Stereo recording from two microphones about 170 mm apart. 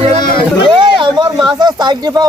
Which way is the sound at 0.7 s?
25° right (ahead or behind).